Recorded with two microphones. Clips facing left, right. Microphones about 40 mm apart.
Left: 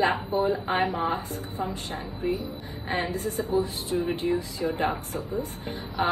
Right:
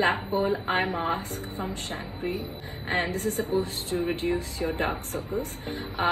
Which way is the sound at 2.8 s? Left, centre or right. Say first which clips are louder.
Right 1 dB; right.